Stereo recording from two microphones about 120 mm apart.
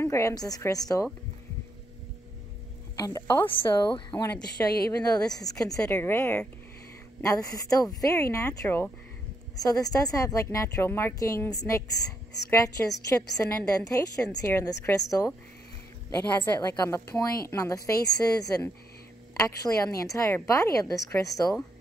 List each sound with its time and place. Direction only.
0.0 s a woman's voice: 25° left (ahead or behind)
3.0 s a woman's voice: 30° left (ahead or behind)
7.2 s a woman's voice: 30° left (ahead or behind)
16.5 s a woman's voice: 30° left (ahead or behind)